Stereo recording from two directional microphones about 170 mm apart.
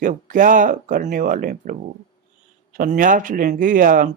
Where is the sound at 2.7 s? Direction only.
50° right (ahead or behind).